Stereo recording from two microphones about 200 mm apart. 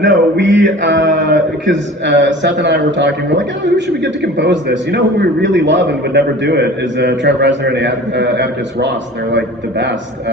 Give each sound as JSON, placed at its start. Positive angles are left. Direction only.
{"t": 0.0, "sound": "mantra", "side_deg": -65}
{"t": 1.6, "sound": "speech", "side_deg": -65}